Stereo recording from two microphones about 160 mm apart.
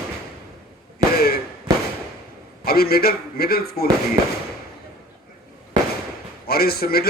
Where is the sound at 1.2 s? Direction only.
70° left (ahead or behind).